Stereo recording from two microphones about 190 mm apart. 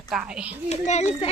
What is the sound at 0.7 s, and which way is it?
Speech, 35° left (ahead or behind).